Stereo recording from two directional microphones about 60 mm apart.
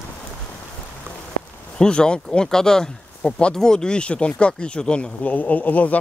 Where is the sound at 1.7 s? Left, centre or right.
Centre.